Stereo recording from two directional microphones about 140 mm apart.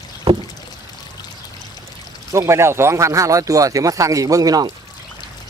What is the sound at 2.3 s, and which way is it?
Speech, 20° right (ahead or behind).